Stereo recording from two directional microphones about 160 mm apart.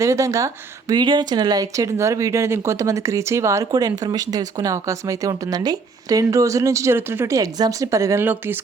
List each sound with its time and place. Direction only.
0.0 s speech: 20° right (ahead or behind)